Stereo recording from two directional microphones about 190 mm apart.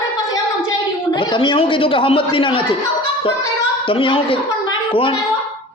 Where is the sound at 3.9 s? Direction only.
25° left (ahead or behind).